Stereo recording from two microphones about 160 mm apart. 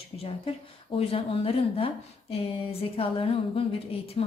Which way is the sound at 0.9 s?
35° left (ahead or behind).